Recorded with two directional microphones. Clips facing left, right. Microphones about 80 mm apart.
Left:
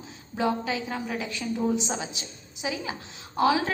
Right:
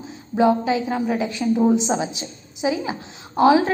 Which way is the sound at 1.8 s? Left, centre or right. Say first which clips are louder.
Right 9 dB; centre.